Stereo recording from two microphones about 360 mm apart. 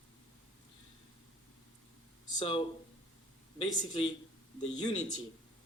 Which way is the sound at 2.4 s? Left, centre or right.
Centre.